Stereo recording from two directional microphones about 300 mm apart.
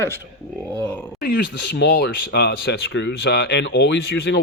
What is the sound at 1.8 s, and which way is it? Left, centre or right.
Speech, left.